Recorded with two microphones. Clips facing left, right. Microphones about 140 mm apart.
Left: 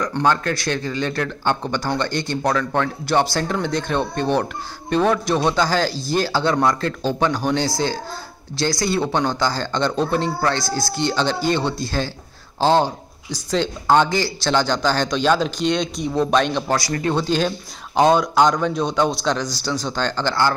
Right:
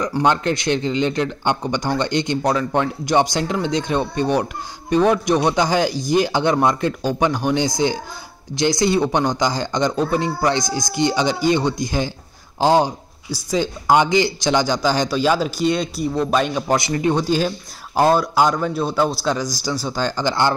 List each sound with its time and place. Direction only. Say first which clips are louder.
0.2 s speech: right 2 dB; 20° right (ahead or behind)
16.7 s speech: right 4 dB; 20° right (ahead or behind)